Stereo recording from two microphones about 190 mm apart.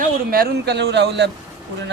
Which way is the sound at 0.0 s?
50° right (ahead or behind).